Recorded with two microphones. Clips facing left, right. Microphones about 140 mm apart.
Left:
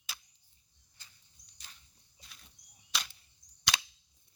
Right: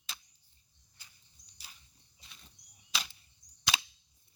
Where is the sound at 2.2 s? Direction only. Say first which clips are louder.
Even; centre (ahead or behind).